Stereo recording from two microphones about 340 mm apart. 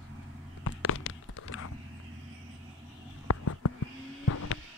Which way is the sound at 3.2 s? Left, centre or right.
Left.